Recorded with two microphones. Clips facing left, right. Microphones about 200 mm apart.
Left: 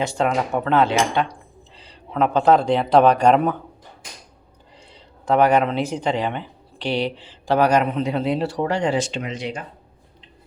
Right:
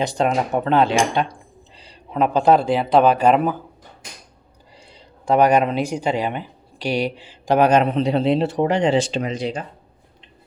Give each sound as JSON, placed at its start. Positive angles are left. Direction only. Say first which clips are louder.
{"t": 0.0, "sound": "speech", "louder": "right 1 dB", "side_deg": -15}
{"t": 5.3, "sound": "speech", "louder": "right 1 dB", "side_deg": -15}